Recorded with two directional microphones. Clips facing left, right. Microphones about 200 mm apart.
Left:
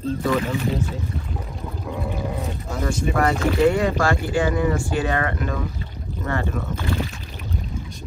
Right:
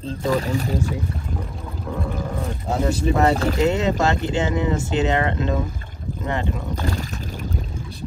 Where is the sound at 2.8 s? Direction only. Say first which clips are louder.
Right 2 dB; 30° right (ahead or behind).